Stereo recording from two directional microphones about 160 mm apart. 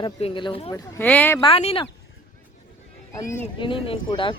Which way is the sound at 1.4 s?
35° left (ahead or behind).